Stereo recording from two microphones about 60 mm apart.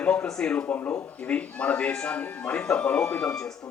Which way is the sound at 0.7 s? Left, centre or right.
Left.